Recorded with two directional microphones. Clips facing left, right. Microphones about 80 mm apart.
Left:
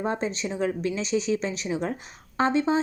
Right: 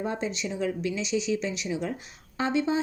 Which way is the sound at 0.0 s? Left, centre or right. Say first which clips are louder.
Left 3 dB; left.